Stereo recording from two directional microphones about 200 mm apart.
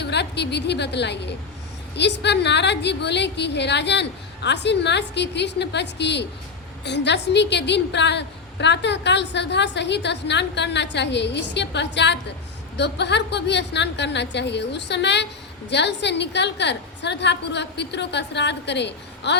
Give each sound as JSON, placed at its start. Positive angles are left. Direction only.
{"t": 0.0, "sound": "a woman's voice", "side_deg": 60}